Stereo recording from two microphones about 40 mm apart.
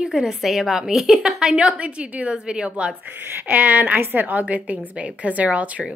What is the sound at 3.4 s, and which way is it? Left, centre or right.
Speech, right.